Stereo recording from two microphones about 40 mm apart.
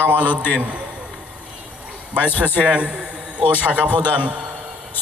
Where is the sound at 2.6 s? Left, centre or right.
Right.